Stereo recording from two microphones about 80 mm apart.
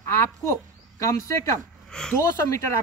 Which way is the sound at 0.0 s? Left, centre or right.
Left.